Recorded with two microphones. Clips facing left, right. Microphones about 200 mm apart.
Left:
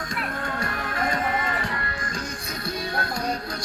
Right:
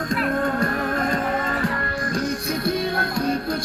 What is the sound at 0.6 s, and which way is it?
Music, 55° right (ahead or behind).